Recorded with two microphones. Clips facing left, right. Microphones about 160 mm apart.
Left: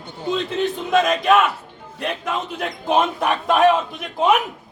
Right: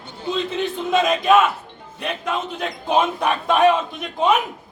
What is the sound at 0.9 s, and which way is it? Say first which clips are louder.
A man's voice: right 1 dB; centre (ahead or behind).